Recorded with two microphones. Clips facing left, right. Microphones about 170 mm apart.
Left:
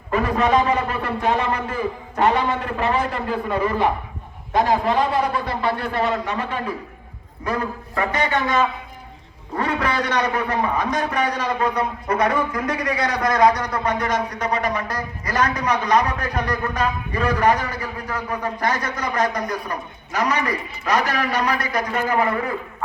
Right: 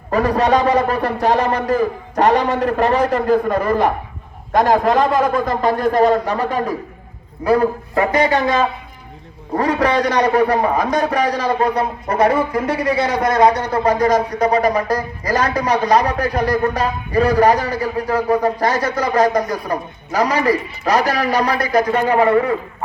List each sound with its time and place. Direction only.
0.1 s a man's voice: 35° right (ahead or behind)